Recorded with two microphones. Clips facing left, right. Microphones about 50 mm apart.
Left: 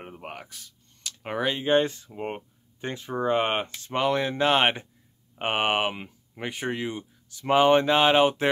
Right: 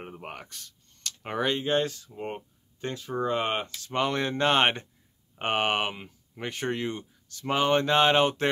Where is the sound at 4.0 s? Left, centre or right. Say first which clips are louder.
Left 2 dB; centre.